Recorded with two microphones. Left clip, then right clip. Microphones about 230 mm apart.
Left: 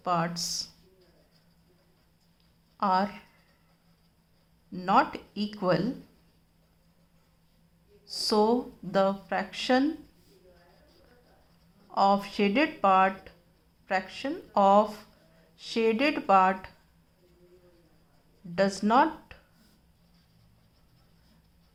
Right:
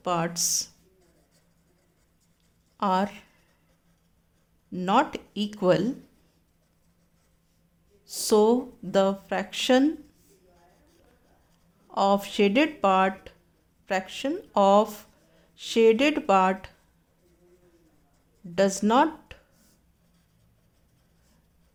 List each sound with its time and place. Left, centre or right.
0.0 s speech: right
2.7 s speech: right
4.7 s speech: right
8.0 s speech: right
11.9 s speech: right
18.5 s speech: right